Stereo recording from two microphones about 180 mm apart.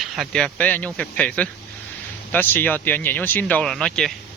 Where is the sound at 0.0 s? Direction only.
Centre (ahead or behind).